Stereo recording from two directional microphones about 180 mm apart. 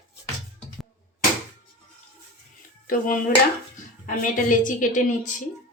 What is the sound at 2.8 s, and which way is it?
A woman's voice, 50° left (ahead or behind).